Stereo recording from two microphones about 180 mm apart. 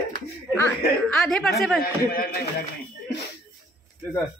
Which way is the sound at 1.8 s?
55° left (ahead or behind).